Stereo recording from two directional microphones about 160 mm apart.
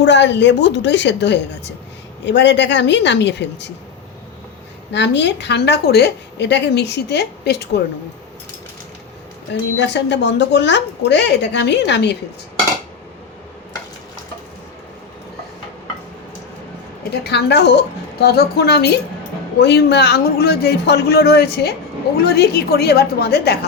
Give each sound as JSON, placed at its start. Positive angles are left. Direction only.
{"t": 0.0, "sound": "a woman's voice", "side_deg": 90}
{"t": 4.9, "sound": "a woman's voice", "side_deg": 90}
{"t": 9.7, "sound": "a woman's voice", "side_deg": 90}
{"t": 17.2, "sound": "a woman's voice", "side_deg": 90}